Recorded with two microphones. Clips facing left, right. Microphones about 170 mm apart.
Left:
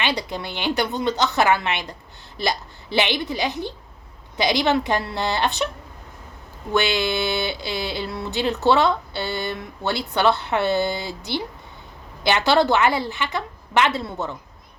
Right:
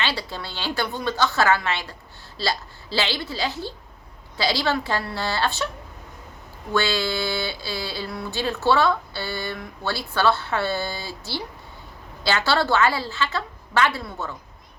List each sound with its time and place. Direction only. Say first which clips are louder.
0.0 s speech: left 3 dB; 20° left (ahead or behind)
6.7 s speech: left 2 dB; 20° left (ahead or behind)